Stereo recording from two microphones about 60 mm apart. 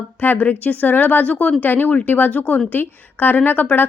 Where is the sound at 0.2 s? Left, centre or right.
Left.